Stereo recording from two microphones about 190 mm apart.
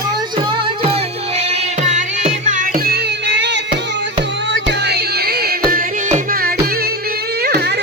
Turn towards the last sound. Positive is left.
turn(degrees=-60)  # may be behind; listen again after turning